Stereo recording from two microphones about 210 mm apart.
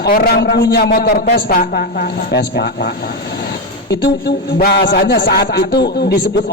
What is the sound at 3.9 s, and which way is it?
A man's voice, 50° left (ahead or behind).